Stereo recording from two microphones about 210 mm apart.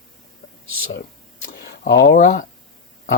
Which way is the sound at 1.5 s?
55° left (ahead or behind).